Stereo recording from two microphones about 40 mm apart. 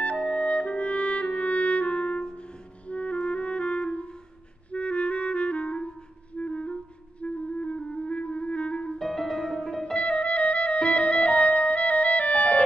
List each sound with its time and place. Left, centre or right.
0.0 s clarinet: left
8.9 s music: centre
9.9 s music: left